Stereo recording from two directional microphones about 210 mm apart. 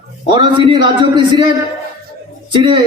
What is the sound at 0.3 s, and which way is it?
A man's voice, 20° right (ahead or behind).